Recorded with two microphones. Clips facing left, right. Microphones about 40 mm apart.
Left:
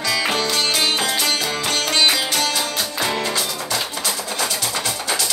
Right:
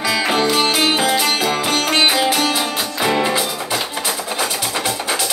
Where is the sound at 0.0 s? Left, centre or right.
Right.